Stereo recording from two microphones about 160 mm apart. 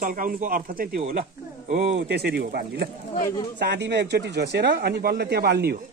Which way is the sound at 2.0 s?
90° right.